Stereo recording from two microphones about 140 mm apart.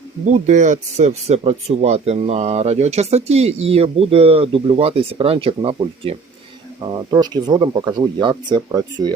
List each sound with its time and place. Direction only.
0.3 s speech: 60° right (ahead or behind); by 6.1 s 40° right (ahead or behind)
6.8 s speech: 30° right (ahead or behind)